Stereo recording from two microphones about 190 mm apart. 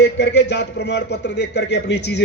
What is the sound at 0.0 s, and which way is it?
A man's voice, 65° left (ahead or behind).